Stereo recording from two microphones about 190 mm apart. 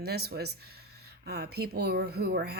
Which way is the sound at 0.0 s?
55° right (ahead or behind).